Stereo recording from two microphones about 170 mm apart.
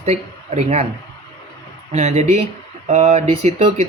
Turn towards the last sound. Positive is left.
turn(degrees=-35)  # may be behind; listen again after turning